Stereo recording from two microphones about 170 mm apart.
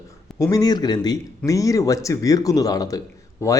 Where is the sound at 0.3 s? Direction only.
20° left (ahead or behind).